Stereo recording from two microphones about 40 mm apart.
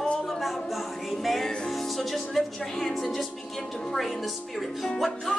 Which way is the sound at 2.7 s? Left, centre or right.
Centre.